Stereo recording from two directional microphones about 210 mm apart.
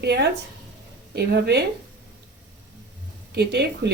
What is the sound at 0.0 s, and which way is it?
A woman's voice, 50° right (ahead or behind).